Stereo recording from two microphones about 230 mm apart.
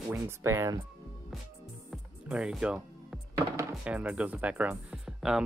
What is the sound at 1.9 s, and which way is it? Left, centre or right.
Speech, centre.